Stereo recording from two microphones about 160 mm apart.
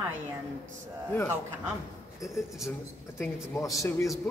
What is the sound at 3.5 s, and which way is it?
Speech, 20° left (ahead or behind).